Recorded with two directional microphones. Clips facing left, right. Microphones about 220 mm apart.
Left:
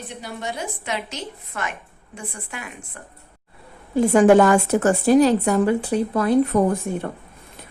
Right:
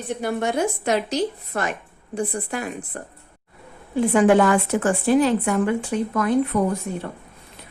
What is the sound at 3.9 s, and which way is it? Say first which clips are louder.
A woman's voice: left 3 dB; 40° left (ahead or behind).